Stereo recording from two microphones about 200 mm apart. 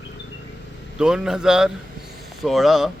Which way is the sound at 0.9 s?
5° right (ahead or behind).